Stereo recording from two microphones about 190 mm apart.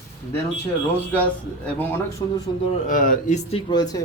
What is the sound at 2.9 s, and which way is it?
Speech, 45° left (ahead or behind).